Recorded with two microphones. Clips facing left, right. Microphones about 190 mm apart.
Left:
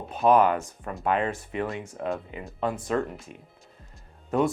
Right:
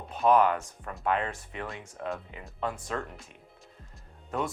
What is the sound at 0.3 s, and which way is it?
Speech, 15° left (ahead or behind).